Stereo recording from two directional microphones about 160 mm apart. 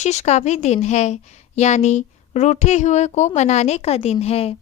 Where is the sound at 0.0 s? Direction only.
45° left (ahead or behind).